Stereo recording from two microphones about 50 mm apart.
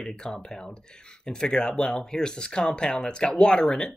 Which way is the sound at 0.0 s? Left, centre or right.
Centre.